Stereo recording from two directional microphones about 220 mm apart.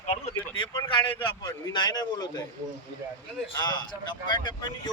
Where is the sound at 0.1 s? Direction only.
25° left (ahead or behind).